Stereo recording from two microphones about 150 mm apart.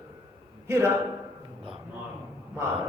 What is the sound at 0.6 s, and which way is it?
Speech, 20° right (ahead or behind).